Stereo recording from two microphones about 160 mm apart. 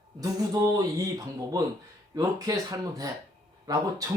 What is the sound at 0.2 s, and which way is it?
Speech, 25° right (ahead or behind).